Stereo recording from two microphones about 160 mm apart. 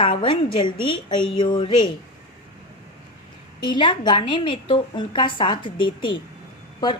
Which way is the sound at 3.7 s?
30° left (ahead or behind).